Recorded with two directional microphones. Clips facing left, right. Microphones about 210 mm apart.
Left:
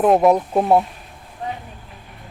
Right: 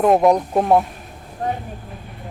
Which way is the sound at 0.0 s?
Centre (ahead or behind).